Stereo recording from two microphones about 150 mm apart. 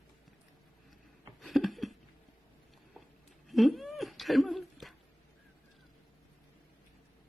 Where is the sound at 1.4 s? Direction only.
Centre (ahead or behind).